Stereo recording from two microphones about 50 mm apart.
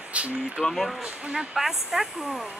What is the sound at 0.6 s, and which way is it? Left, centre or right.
Speech, centre.